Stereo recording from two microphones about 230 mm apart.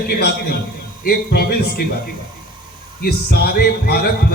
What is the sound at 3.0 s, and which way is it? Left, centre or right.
Speech, left.